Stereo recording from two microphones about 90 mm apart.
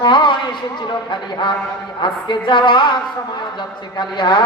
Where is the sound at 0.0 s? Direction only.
60° left (ahead or behind).